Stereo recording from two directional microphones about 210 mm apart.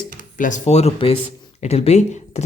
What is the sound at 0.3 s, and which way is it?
Speech, 35° left (ahead or behind).